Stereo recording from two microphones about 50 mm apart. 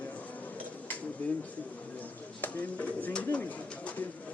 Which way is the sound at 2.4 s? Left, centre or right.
Left.